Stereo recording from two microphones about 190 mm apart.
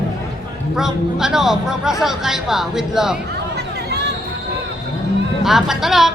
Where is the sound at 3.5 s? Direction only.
60° right (ahead or behind).